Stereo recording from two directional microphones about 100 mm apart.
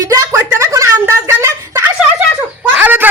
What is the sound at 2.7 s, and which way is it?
Bird, 20° right (ahead or behind).